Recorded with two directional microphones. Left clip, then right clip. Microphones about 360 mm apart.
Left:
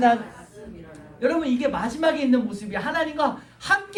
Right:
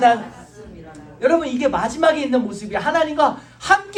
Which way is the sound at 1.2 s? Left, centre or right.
Centre.